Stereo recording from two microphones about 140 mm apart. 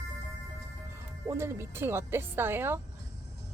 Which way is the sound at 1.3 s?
20° right (ahead or behind).